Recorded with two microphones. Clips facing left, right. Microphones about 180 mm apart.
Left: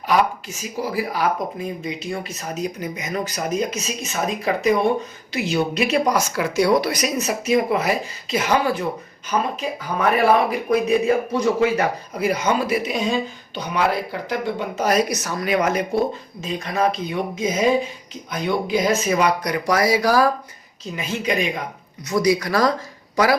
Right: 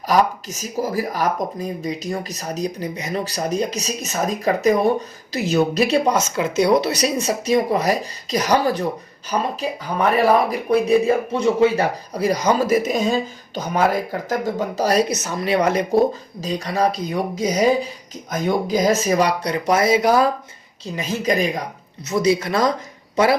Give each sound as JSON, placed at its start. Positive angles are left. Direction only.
{"t": 0.1, "sound": "speech", "side_deg": -40}
{"t": 10.5, "sound": "speech", "side_deg": -35}
{"t": 15.1, "sound": "speech", "side_deg": -20}
{"t": 20.8, "sound": "speech", "side_deg": -35}
{"t": 22.1, "sound": "speech", "side_deg": -25}